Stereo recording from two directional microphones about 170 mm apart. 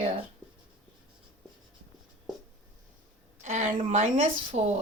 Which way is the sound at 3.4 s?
50° right (ahead or behind).